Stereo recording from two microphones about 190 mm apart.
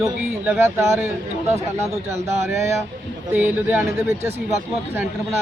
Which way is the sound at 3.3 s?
10° right (ahead or behind).